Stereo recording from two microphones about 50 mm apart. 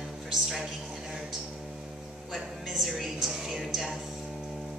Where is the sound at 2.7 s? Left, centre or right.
Centre.